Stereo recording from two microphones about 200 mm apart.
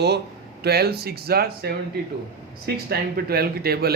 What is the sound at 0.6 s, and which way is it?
Speech, 50° right (ahead or behind).